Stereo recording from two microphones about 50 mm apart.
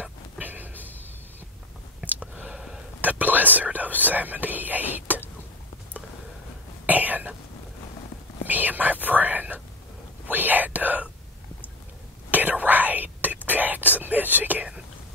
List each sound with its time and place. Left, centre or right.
0.4 s a sound: right
2.0 s a sound: right
3.0 s whispering: right
4.0 s speech: right
6.9 s cough: right
8.5 s whispering: right
12.3 s whispering: right